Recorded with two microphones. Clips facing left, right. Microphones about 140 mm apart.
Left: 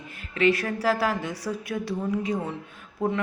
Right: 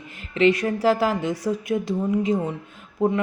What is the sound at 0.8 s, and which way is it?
A woman's voice, 25° right (ahead or behind).